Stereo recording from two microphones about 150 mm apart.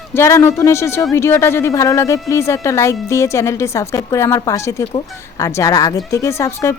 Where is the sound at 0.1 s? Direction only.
20° left (ahead or behind).